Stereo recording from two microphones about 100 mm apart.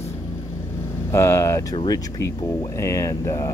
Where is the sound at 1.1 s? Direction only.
30° left (ahead or behind).